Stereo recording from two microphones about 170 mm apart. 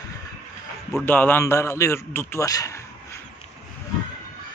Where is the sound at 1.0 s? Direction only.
10° left (ahead or behind).